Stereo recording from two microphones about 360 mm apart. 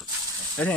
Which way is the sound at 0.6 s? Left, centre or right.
Centre.